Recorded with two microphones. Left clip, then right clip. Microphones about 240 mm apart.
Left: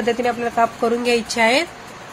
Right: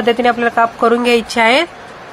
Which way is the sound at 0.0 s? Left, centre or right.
Centre.